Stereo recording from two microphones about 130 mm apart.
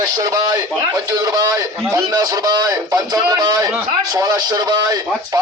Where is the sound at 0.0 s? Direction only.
30° right (ahead or behind).